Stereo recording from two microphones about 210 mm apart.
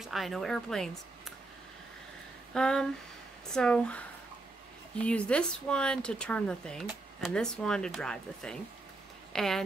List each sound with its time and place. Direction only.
0.0 s speech: centre (ahead or behind)
2.5 s speech: 5° left (ahead or behind)
5.0 s a woman's voice: 5° left (ahead or behind)